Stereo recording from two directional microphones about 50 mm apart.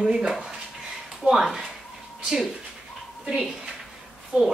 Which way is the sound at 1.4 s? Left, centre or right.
Centre.